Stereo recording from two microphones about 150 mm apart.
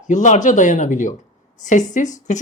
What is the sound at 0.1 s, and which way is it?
Speech, 55° left (ahead or behind).